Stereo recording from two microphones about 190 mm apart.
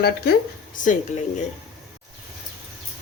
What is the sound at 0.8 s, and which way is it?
Speech, 40° left (ahead or behind).